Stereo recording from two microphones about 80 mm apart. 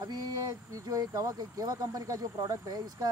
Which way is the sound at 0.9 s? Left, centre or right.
Right.